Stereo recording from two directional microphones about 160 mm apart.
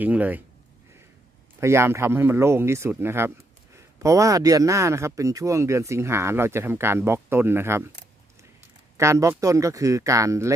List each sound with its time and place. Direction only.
0.0 s speech: 10° right (ahead or behind)
1.6 s speech: 15° right (ahead or behind)
9.0 s speech: 20° right (ahead or behind)